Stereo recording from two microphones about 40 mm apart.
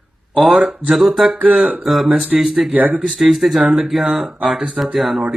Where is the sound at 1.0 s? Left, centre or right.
Centre.